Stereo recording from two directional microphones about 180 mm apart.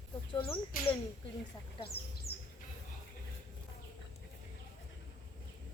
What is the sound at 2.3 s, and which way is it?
Bird, 60° left (ahead or behind).